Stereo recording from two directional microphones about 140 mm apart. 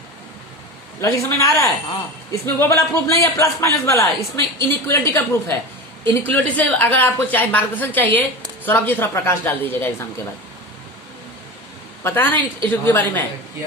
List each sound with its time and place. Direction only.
1.0 s a man's voice: 20° left (ahead or behind)
12.0 s a woman's voice: 15° left (ahead or behind)